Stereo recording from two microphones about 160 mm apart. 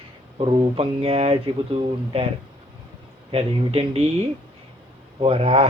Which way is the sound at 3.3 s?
40° right (ahead or behind).